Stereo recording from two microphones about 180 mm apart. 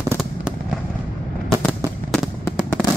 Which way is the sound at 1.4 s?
Centre (ahead or behind).